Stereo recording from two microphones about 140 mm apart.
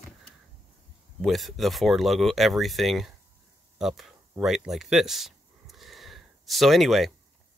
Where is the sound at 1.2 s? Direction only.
Centre (ahead or behind).